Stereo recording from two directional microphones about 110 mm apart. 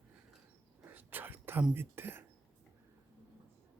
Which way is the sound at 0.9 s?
15° right (ahead or behind).